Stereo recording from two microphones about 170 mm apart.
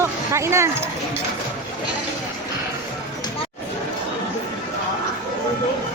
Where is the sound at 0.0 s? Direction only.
15° right (ahead or behind).